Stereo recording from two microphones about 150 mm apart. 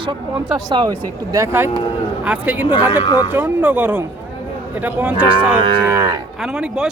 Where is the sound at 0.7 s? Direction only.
25° right (ahead or behind); by 2.7 s 10° right (ahead or behind).